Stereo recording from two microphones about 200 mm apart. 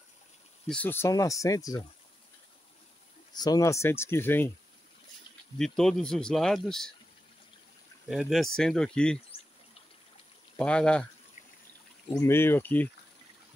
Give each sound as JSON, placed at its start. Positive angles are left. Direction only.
{"t": 0.7, "sound": "speech", "side_deg": 10}
{"t": 3.3, "sound": "speech", "side_deg": 20}
{"t": 5.6, "sound": "speech", "side_deg": 0}
{"t": 8.1, "sound": "speech", "side_deg": 0}
{"t": 10.6, "sound": "speech", "side_deg": 5}
{"t": 12.1, "sound": "speech", "side_deg": 15}